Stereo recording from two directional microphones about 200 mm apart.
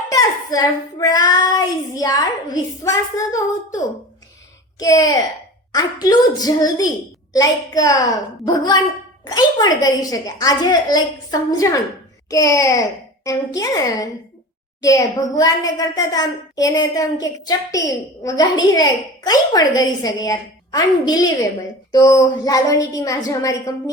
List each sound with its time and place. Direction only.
0.1 s a woman's voice: 20° left (ahead or behind)
4.8 s a woman's voice: 20° left (ahead or behind)